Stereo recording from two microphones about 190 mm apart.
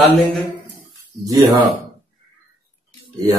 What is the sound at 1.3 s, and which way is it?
Speech, 20° right (ahead or behind).